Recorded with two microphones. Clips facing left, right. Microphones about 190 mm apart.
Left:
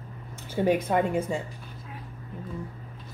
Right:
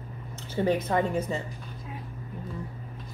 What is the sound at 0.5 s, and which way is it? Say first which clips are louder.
Speech: left 2 dB; 10° left (ahead or behind).